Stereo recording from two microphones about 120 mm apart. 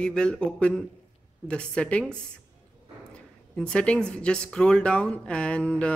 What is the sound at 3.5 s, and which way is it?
Speech, 10° left (ahead or behind).